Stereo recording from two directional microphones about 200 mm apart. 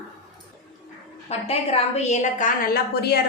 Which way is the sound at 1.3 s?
30° left (ahead or behind).